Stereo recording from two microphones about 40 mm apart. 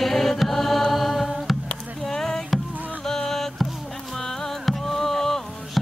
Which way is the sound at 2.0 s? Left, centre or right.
Centre.